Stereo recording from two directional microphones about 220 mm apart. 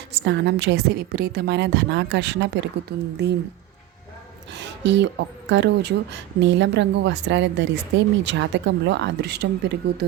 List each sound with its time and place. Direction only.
0.3 s speech: 55° right (ahead or behind)
4.5 s a sound: 55° right (ahead or behind)
5.5 s speech: 50° right (ahead or behind)